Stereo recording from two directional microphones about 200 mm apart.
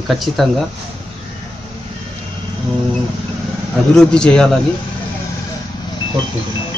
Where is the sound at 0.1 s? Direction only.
Centre (ahead or behind).